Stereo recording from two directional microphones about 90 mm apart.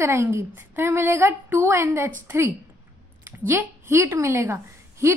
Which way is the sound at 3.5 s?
25° right (ahead or behind).